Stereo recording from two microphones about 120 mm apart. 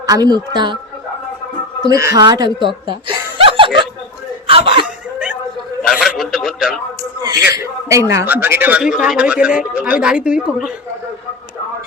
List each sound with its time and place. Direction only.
0.0 s speech: 30° right (ahead or behind)
1.8 s speech: 30° right (ahead or behind)
3.3 s snicker: 45° right (ahead or behind)
4.4 s a sound: 50° right (ahead or behind)
5.8 s a sound: centre (ahead or behind)
7.2 s a man's voice: 30° right (ahead or behind); by 10.7 s 10° right (ahead or behind)